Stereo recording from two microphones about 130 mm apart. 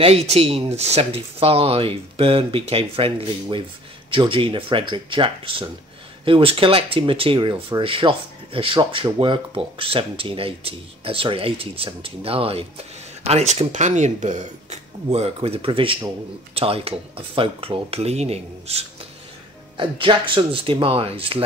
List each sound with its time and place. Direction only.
0.0 s speech: 50° right (ahead or behind)
19.8 s speech: 40° right (ahead or behind)